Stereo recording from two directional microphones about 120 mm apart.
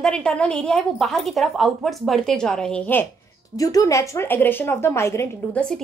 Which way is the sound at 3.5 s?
30° left (ahead or behind).